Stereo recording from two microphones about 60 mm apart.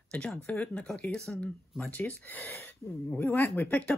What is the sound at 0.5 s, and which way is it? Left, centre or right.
Speech, centre.